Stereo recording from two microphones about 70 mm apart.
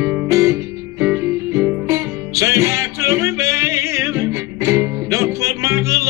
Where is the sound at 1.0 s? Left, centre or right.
Right.